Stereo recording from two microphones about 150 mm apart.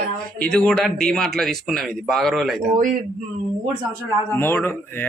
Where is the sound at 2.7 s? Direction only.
60° right (ahead or behind).